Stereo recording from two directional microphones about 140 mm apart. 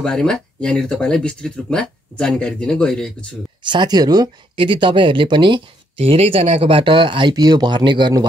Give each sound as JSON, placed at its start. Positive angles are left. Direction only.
{"t": 0.0, "sound": "speech", "side_deg": 5}
{"t": 3.6, "sound": "speech", "side_deg": -30}